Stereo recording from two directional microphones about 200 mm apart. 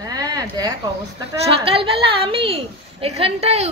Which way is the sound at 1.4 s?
30° right (ahead or behind).